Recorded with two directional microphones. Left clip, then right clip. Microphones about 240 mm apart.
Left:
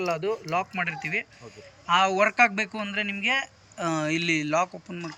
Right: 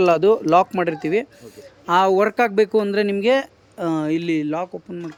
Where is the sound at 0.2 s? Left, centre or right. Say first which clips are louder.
Right 13 dB; right.